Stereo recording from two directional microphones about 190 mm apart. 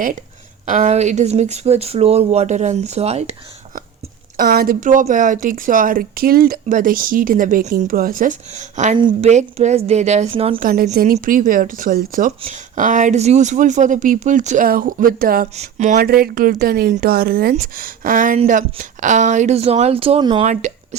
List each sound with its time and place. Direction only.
0.6 s speech: 40° right (ahead or behind)
4.4 s speech: 50° right (ahead or behind)
9.0 s speech: 25° right (ahead or behind)
9.3 s speech: 35° right (ahead or behind)
10.6 s speech: 45° right (ahead or behind)
15.5 s speech: 40° right (ahead or behind)
20.4 s speech: 40° right (ahead or behind)